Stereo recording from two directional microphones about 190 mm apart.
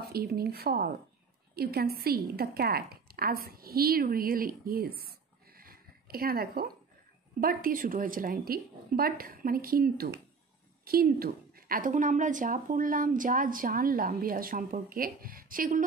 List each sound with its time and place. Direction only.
0.1 s a woman's voice: 55° right (ahead or behind)
5.6 s a sound: 50° right (ahead or behind)
7.3 s a woman's voice: 50° right (ahead or behind)